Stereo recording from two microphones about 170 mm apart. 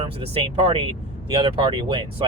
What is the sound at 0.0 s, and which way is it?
Speech, 35° right (ahead or behind).